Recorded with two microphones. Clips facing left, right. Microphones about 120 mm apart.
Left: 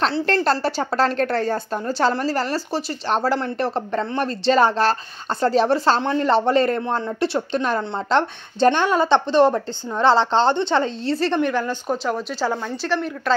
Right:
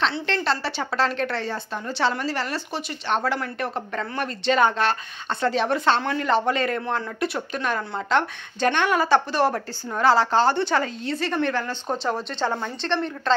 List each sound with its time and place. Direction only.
0.0 s a woman's voice: 45° left (ahead or behind)
6.8 s speech: 25° left (ahead or behind)
11.3 s speech: 15° left (ahead or behind)
11.9 s speech: centre (ahead or behind)